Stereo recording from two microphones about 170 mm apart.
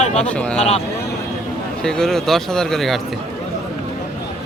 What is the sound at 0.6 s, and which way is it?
Speech, 35° left (ahead or behind).